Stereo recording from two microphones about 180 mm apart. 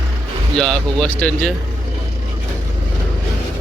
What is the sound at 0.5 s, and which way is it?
Speech, 5° left (ahead or behind).